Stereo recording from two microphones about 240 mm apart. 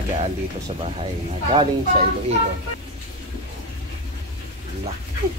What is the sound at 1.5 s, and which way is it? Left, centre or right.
Speech, right.